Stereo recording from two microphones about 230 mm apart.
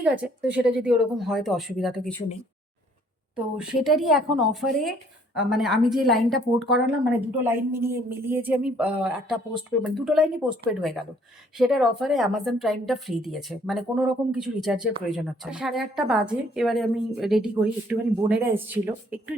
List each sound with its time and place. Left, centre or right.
0.0 s a woman's voice: centre
3.3 s a woman's voice: centre